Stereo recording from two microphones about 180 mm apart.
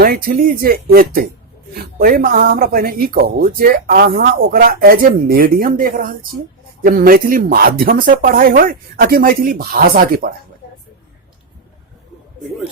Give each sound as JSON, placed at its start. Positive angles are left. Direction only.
{"t": 0.0, "sound": "speech", "side_deg": -55}